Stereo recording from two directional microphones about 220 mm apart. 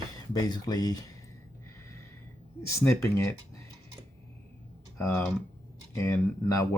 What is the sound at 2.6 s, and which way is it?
Speech, 10° left (ahead or behind).